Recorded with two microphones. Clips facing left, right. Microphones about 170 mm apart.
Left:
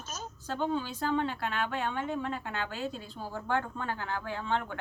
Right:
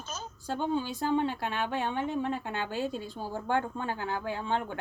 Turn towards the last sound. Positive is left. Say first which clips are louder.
# right 1 dB
turn(degrees=-15)  # may be behind; listen again after turning